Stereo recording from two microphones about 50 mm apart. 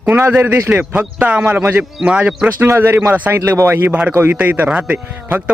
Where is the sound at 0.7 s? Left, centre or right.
Right.